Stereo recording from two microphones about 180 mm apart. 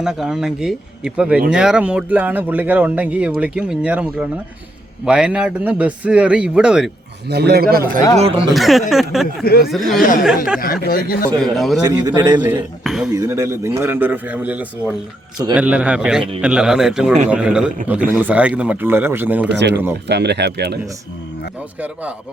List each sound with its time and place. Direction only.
0.0 s speech: 5° right (ahead or behind)
7.3 s speech: 65° right (ahead or behind)
8.5 s speech: centre (ahead or behind)
9.4 s speech: 60° left (ahead or behind)
9.6 s speech: centre (ahead or behind)
10.0 s speech: 50° left (ahead or behind)
10.2 s speech: 5° right (ahead or behind)
10.6 s speech: 55° left (ahead or behind)
11.3 s speech: 5° left (ahead or behind)
11.8 s a man's voice: 20° right (ahead or behind)
12.8 s speech: centre (ahead or behind)
13.1 s speech: 20° right (ahead or behind)
19.5 s speech: 75° right (ahead or behind)